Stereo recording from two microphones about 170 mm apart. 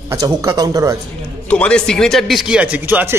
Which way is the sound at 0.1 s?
20° right (ahead or behind).